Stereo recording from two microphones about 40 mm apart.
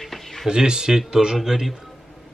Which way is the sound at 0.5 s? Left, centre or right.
Centre.